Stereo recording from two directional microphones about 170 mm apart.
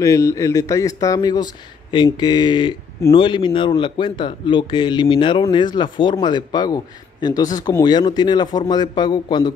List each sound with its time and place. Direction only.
0.0 s speech: 20° left (ahead or behind)